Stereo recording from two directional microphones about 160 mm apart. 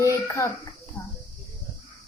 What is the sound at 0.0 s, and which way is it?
Speech, 20° left (ahead or behind).